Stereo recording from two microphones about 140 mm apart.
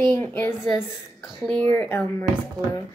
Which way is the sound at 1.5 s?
10° left (ahead or behind).